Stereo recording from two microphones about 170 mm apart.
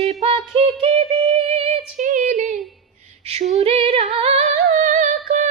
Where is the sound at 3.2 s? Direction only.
35° right (ahead or behind).